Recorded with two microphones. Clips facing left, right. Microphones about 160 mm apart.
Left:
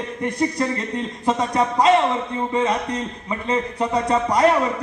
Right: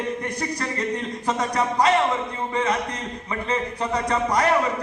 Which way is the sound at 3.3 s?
25° left (ahead or behind).